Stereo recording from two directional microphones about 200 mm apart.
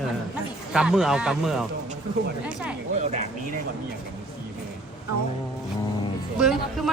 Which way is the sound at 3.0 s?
35° right (ahead or behind).